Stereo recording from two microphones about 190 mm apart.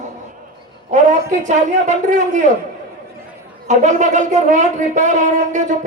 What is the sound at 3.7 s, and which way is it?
Speech, 40° right (ahead or behind).